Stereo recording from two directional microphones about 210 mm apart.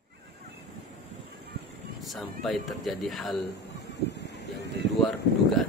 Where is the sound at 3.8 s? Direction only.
55° left (ahead or behind).